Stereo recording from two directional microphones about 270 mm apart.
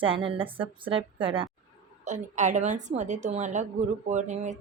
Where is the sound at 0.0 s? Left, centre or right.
Centre.